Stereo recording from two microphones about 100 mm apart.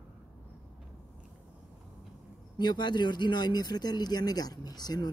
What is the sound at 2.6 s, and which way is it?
Speech, 45° left (ahead or behind).